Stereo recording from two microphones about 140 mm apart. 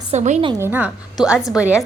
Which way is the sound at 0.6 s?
15° right (ahead or behind).